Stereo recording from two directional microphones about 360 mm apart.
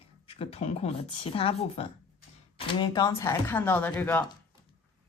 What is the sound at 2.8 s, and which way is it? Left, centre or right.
Speech, centre.